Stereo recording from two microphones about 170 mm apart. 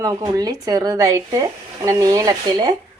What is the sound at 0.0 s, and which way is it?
Speech, 20° right (ahead or behind).